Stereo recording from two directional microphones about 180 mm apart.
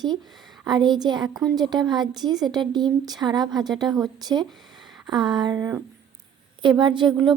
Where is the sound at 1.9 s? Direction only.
25° right (ahead or behind).